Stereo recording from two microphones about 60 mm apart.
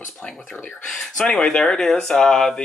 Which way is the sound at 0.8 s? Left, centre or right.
Centre.